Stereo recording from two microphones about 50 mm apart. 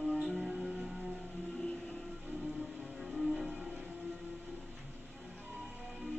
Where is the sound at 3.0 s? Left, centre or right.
Centre.